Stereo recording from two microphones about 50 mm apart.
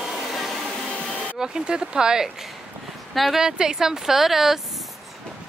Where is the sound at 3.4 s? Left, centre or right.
Centre.